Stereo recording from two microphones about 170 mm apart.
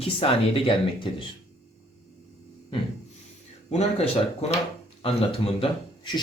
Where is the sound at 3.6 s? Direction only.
40° left (ahead or behind).